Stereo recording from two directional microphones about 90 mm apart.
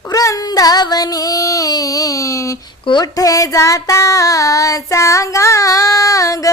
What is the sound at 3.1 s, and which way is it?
Child singing, 40° left (ahead or behind).